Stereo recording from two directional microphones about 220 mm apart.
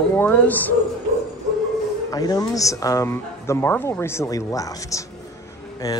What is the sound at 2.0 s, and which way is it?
Speech, 15° left (ahead or behind).